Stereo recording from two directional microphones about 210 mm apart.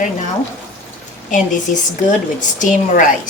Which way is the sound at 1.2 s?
35° left (ahead or behind).